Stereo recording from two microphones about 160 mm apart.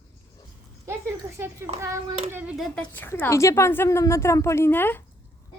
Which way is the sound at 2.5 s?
10° left (ahead or behind).